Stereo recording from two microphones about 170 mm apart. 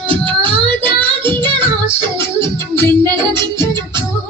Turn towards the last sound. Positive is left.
turn(degrees=-25)  # may be behind; listen again after turning